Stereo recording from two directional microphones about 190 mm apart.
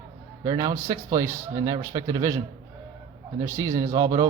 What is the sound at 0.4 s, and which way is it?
Speech, 20° right (ahead or behind).